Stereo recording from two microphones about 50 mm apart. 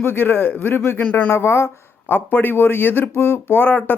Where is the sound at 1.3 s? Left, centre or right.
Left.